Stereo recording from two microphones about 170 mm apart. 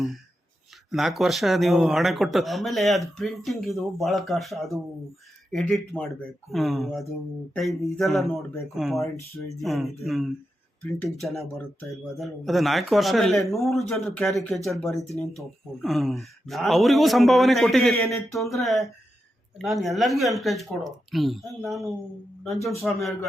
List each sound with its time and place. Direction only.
0.9 s a man's voice: centre (ahead or behind)
17.9 s a sound: 15° left (ahead or behind)
18.3 s a man's voice: centre (ahead or behind)